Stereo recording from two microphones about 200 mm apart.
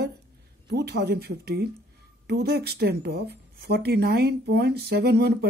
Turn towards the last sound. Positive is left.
turn(degrees=-55)  # may be behind; listen again after turning